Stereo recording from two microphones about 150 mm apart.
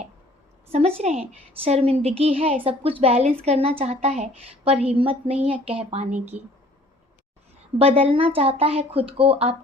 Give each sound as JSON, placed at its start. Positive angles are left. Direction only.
{"t": 0.7, "sound": "a woman's voice", "side_deg": -40}
{"t": 7.8, "sound": "speech", "side_deg": -40}